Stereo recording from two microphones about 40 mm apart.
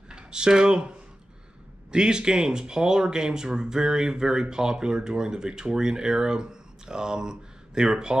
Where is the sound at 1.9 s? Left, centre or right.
Right.